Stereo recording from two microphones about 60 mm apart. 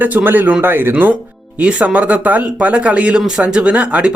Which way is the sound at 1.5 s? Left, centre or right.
Right.